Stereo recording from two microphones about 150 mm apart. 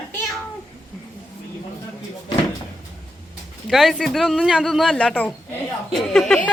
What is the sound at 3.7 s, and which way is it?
Speech, centre (ahead or behind).